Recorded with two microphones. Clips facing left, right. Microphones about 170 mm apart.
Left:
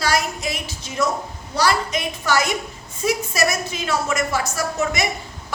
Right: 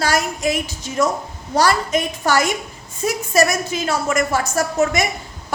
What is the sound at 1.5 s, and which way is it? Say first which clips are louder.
A woman's voice: right 3 dB; 45° right (ahead or behind).